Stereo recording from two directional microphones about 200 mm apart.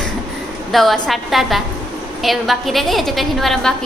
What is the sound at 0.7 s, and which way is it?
A woman's voice, centre (ahead or behind).